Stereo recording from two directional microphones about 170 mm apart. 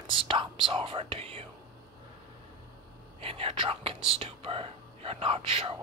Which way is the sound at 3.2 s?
35° right (ahead or behind).